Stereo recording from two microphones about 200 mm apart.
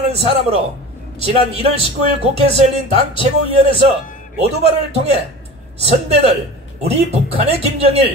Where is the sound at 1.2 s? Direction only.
30° right (ahead or behind).